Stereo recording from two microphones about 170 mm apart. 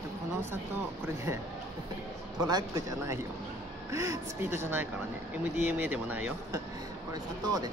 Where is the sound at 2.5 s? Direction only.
20° right (ahead or behind).